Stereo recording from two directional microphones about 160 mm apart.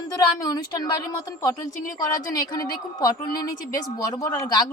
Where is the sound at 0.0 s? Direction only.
25° left (ahead or behind).